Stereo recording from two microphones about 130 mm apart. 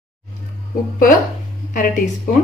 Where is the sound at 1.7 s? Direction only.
90° left.